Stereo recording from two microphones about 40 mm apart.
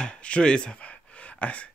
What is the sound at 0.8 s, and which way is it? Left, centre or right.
Gasp, left.